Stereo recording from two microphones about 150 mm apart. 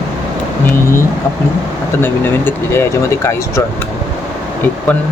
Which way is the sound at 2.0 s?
15° left (ahead or behind).